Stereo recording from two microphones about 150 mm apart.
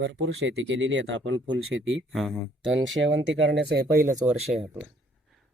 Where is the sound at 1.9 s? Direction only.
Centre (ahead or behind).